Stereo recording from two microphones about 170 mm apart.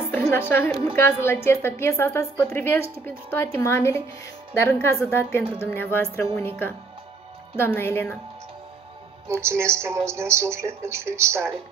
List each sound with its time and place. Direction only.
0.1 s music: 10° left (ahead or behind)
0.9 s a woman's voice: 15° left (ahead or behind)
9.3 s a woman's voice: 15° right (ahead or behind)